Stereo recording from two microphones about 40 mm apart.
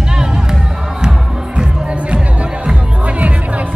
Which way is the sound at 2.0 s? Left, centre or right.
Right.